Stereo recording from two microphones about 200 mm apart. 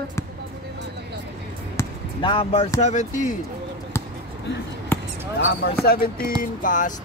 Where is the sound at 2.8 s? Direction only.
35° left (ahead or behind).